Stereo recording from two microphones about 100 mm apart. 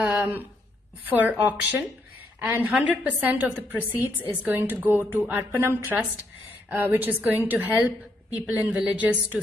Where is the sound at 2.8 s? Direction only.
15° right (ahead or behind).